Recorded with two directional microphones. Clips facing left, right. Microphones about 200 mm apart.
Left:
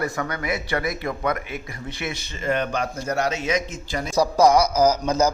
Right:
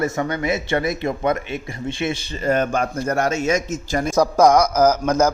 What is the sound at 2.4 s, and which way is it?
A man's voice, 45° right (ahead or behind).